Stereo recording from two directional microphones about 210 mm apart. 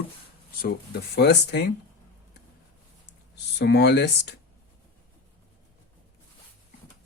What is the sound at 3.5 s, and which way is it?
Speech, 50° left (ahead or behind).